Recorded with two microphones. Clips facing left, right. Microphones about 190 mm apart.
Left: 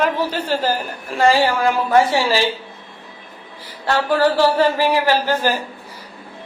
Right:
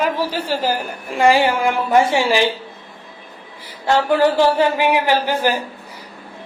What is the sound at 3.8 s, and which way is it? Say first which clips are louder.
Speech: right 2 dB; 15° right (ahead or behind).